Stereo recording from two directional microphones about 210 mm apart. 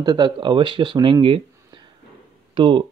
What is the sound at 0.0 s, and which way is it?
Speech, 20° right (ahead or behind).